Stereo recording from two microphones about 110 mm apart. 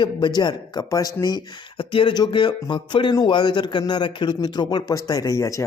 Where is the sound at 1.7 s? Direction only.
55° left (ahead or behind).